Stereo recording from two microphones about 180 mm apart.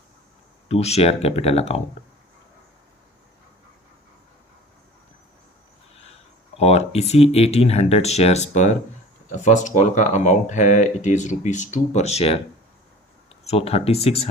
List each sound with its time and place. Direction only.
0.7 s speech: 35° left (ahead or behind)
6.6 s speech: 35° left (ahead or behind)
13.5 s speech: 35° left (ahead or behind)